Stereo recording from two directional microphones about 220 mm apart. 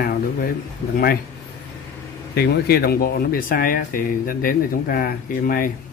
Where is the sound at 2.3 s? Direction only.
45° left (ahead or behind).